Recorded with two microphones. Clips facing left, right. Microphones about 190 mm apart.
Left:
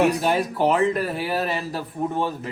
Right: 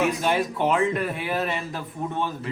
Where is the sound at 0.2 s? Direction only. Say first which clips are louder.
Left 2 dB; 35° left (ahead or behind).